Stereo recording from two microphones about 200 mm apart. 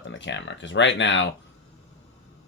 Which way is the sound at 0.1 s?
65° left (ahead or behind).